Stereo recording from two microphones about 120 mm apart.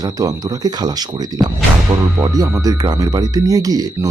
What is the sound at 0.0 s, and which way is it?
Speech, 30° right (ahead or behind).